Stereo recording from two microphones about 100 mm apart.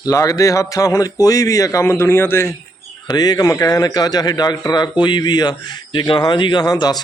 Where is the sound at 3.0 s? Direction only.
45° left (ahead or behind).